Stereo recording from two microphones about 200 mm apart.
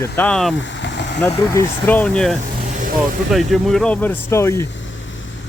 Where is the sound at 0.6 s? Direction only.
65° left (ahead or behind).